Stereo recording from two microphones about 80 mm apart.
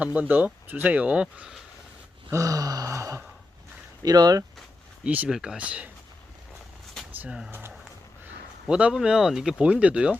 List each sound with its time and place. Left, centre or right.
0.0 s speech: centre
2.3 s a sound: right
4.0 s speech: right
5.0 s speech: centre
5.3 s speech: centre
5.6 s speech: centre
7.1 s a sound: right
8.7 s speech: centre